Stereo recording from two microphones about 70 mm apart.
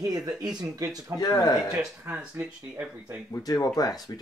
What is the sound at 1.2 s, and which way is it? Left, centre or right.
Speech, left.